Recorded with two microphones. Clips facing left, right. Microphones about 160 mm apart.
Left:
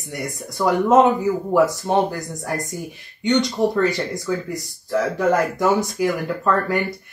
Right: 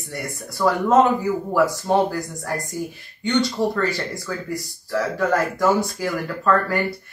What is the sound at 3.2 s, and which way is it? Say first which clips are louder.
Speech: left 2 dB; 20° left (ahead or behind).